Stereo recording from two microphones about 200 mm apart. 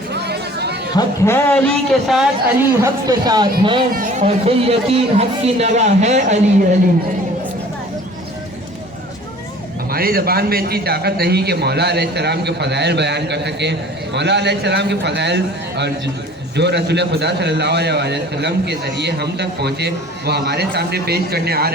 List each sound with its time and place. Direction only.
0.1 s a sound: 55° right (ahead or behind)
0.9 s a man's voice: 15° left (ahead or behind)
2.8 s speech: 20° right (ahead or behind)
3.9 s speech: 40° right (ahead or behind)
9.9 s a man's voice: 50° right (ahead or behind)